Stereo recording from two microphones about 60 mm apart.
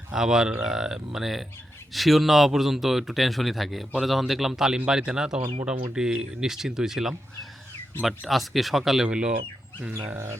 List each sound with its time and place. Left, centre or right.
0.1 s speech: centre
9.0 s speech: centre